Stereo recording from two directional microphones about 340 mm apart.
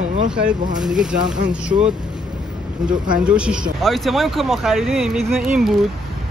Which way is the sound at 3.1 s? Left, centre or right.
Centre.